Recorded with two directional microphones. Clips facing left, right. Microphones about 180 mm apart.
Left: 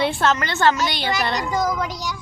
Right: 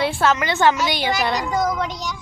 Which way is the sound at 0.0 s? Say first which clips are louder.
Right 1 dB; 5° right (ahead or behind).